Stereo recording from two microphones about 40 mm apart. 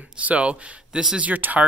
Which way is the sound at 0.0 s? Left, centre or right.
Right.